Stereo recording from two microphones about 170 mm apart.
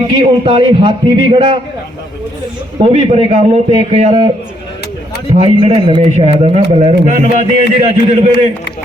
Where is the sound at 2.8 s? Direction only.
35° right (ahead or behind).